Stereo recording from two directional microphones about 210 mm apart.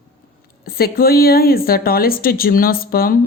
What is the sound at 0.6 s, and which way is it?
A woman's voice, 45° left (ahead or behind).